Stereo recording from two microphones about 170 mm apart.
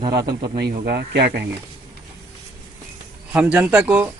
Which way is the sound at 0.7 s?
65° right (ahead or behind).